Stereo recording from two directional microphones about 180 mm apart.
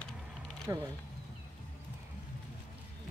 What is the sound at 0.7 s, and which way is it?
Speech, 15° right (ahead or behind).